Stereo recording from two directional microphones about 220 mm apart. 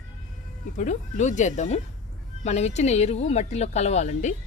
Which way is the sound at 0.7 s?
35° left (ahead or behind).